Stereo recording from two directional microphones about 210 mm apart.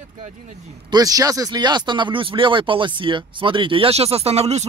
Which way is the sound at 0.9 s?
15° right (ahead or behind).